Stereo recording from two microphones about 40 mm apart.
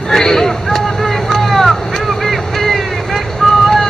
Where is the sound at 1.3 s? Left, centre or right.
Centre.